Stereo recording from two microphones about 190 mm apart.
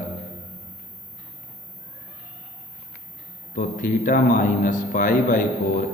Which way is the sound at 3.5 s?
45° left (ahead or behind).